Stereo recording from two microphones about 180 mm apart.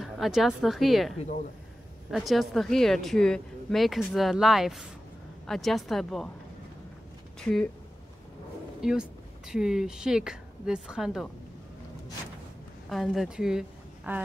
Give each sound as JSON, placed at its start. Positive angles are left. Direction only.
{"t": 0.0, "sound": "speech", "side_deg": 0}
{"t": 7.3, "sound": "speech", "side_deg": 5}
{"t": 8.8, "sound": "speech", "side_deg": -5}
{"t": 12.9, "sound": "a woman's voice", "side_deg": 0}